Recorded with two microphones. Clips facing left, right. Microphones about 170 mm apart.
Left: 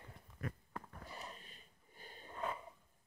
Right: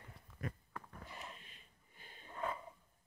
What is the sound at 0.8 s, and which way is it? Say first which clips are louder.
Sniff: left 1 dB; 35° left (ahead or behind).